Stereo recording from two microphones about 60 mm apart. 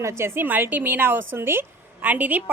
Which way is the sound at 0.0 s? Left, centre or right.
Right.